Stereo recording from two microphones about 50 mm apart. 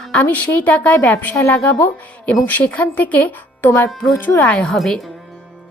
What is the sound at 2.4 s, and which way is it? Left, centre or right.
Speech, left.